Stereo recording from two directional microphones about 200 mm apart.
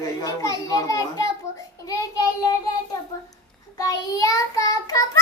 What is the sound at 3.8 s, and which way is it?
A child's voice, 15° left (ahead or behind).